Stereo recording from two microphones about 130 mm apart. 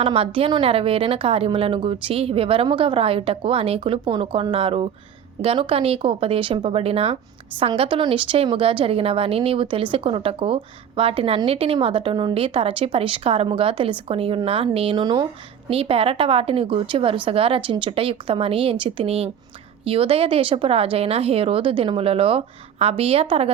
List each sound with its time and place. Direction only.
0.0 s a woman's voice: 45° right (ahead or behind)
15.7 s a woman's voice: 45° right (ahead or behind)